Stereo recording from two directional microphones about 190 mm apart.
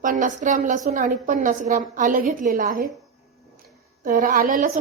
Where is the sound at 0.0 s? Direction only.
45° right (ahead or behind).